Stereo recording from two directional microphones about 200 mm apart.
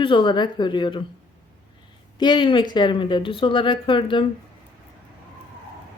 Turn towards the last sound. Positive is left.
turn(degrees=25)  # may be behind; listen again after turning